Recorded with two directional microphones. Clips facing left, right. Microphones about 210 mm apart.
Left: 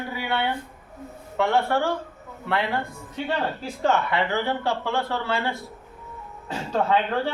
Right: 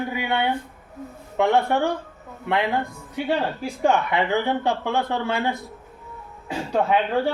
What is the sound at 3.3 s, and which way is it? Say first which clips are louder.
Speech: right 3 dB; 15° right (ahead or behind).